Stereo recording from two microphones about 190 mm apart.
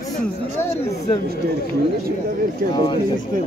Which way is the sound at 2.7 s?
20° left (ahead or behind).